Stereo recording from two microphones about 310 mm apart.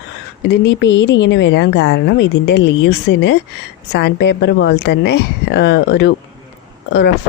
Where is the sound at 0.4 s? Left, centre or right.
Left.